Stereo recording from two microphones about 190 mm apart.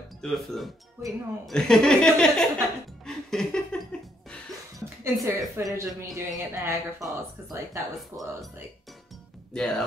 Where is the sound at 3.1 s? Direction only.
5° left (ahead or behind).